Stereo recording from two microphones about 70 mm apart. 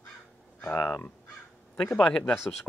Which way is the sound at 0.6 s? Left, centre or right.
Left.